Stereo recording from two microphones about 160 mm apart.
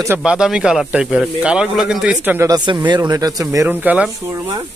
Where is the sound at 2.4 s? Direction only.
25° right (ahead or behind); by 4.1 s 10° right (ahead or behind).